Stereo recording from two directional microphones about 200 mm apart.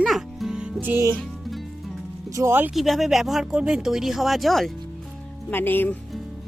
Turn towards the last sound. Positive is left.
turn(degrees=10)  # may be behind; listen again after turning